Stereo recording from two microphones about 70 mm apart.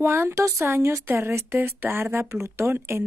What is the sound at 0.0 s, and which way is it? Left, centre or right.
Speech, right.